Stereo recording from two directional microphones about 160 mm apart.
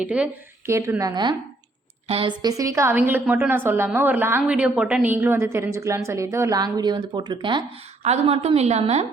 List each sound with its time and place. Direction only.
0.0 s a woman's voice: 10° right (ahead or behind); by 2.3 s 35° right (ahead or behind)
2.4 s a woman's voice: 20° right (ahead or behind)
8.0 s a woman's voice: 40° right (ahead or behind)